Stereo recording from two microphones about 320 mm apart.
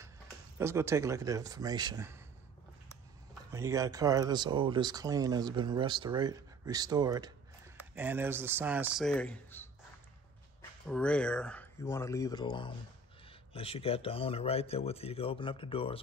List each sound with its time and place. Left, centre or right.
0.6 s speech: centre
3.5 s speech: centre
10.9 s a man's voice: centre